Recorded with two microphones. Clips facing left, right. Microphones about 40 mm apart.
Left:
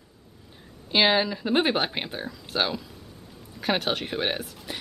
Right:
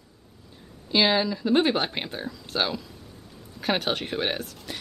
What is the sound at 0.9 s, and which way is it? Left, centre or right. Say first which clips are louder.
A woman's voice: left 1 dB; centre.